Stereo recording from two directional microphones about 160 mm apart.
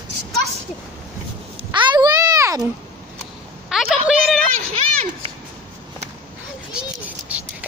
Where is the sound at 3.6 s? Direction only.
Centre (ahead or behind).